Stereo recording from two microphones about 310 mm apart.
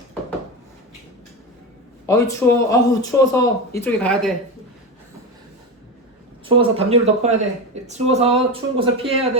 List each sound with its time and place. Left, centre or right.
2.0 s speech: centre
6.4 s speech: centre